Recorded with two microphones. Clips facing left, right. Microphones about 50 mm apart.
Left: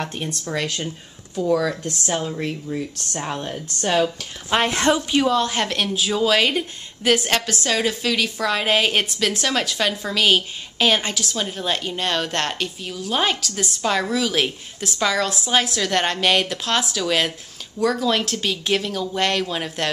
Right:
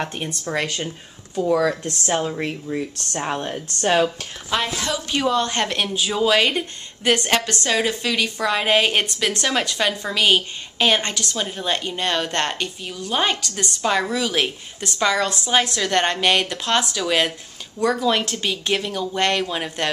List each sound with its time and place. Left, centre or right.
0.0 s a woman's voice: centre
4.6 s a woman's voice: left
5.1 s a woman's voice: centre